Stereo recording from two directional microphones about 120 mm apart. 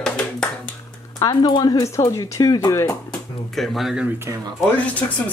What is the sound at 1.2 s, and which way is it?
Speech, 35° left (ahead or behind).